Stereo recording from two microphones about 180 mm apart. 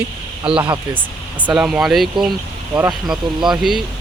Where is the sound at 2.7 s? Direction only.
20° right (ahead or behind).